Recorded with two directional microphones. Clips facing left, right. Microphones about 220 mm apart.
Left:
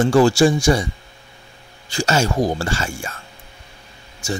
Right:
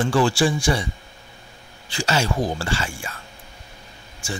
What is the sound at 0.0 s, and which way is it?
Speech, 45° left (ahead or behind).